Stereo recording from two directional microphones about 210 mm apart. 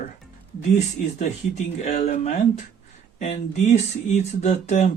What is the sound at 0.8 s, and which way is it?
Speech, 35° left (ahead or behind).